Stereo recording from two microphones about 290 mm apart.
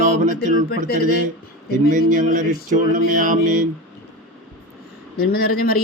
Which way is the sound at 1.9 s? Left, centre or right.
Right.